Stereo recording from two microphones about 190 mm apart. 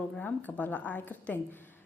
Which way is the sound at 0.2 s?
10° left (ahead or behind).